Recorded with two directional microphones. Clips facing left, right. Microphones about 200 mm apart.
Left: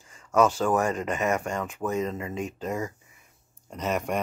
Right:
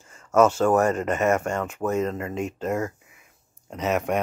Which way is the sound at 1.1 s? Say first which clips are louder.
Right 4 dB; 45° right (ahead or behind).